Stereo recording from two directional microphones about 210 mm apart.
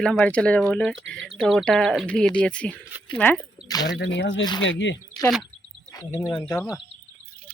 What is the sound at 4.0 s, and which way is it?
Speech, 60° left (ahead or behind).